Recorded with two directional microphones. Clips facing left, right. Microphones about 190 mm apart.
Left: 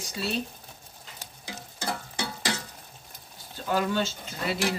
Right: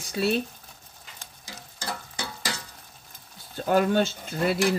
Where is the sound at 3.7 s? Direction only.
50° right (ahead or behind).